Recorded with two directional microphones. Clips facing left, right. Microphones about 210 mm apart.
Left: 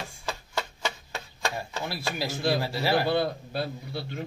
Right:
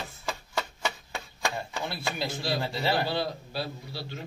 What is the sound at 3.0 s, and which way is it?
A man's voice, 55° left (ahead or behind).